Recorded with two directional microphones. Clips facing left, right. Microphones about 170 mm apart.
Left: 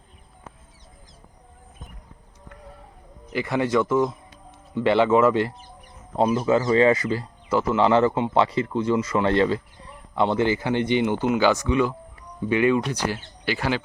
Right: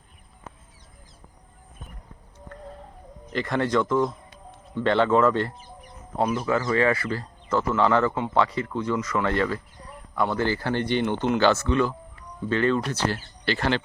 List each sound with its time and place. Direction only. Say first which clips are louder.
3.2 s speech: left 1 dB; 10° left (ahead or behind)
6.1 s speech: left 4 dB; 25° left (ahead or behind)
7.7 s speech: left 3 dB; 25° left (ahead or behind); by 13.8 s 10° left (ahead or behind)